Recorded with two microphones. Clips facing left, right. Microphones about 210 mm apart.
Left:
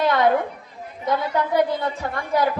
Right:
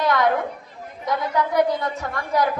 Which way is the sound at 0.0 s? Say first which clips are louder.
Left 1 dB; 30° left (ahead or behind).